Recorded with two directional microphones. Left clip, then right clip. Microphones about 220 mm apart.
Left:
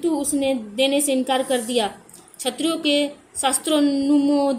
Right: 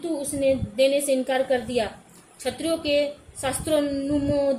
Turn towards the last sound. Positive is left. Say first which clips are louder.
# left 4 dB
turn(degrees=30)  # may be behind; listen again after turning